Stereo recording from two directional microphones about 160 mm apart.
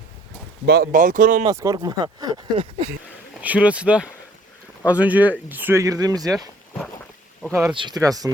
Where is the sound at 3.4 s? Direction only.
10° right (ahead or behind).